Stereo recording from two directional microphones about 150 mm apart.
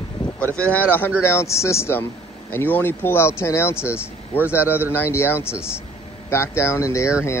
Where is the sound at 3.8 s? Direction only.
10° right (ahead or behind).